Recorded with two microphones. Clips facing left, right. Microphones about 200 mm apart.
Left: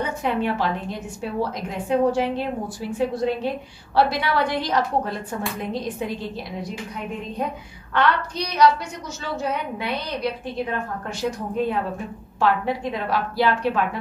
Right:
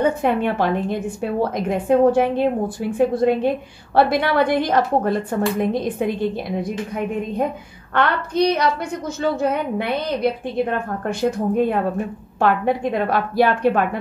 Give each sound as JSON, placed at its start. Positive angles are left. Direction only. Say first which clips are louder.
{"t": 0.0, "sound": "a woman's voice", "louder": "right 6 dB", "side_deg": -55}
{"t": 7.9, "sound": "a woman's voice", "louder": "right 2 dB", "side_deg": -55}